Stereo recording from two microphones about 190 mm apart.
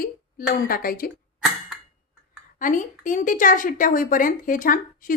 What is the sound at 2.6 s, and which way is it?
A woman's voice, 45° left (ahead or behind).